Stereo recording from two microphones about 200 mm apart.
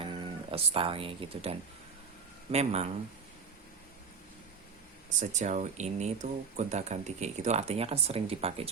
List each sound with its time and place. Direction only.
0.0 s speech: 25° right (ahead or behind)
5.2 s speech: 35° right (ahead or behind)